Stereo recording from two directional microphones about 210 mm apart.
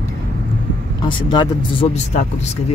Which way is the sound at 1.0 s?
20° left (ahead or behind).